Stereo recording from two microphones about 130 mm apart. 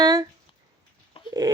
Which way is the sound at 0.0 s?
30° right (ahead or behind).